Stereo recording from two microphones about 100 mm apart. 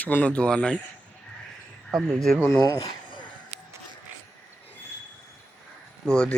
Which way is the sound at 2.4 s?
25° left (ahead or behind).